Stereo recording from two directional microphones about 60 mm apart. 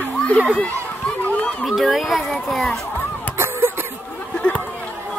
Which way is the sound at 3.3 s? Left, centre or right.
Right.